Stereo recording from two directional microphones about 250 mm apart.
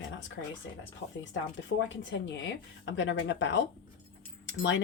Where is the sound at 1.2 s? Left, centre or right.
Left.